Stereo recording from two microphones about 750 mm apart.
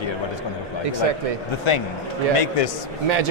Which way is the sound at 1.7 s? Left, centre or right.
Left.